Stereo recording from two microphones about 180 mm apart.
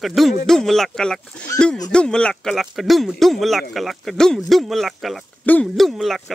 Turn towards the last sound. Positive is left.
turn(degrees=0)  # may be behind; listen again after turning